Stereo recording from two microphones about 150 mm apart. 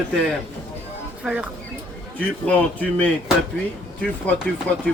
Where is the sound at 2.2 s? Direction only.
10° left (ahead or behind).